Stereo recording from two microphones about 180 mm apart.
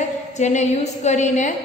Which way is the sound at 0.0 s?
40° left (ahead or behind).